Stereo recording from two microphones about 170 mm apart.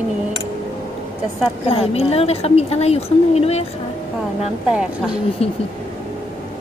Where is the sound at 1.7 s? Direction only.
35° left (ahead or behind).